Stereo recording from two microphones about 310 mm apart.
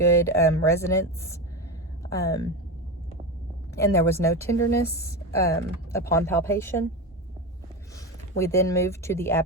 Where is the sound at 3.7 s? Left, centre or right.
Centre.